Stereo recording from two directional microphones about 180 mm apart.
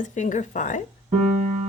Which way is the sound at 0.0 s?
45° left (ahead or behind).